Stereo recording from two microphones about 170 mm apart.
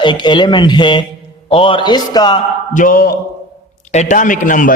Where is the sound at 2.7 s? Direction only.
55° left (ahead or behind).